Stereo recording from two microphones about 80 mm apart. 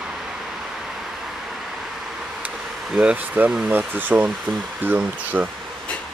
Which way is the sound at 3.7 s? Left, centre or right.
Right.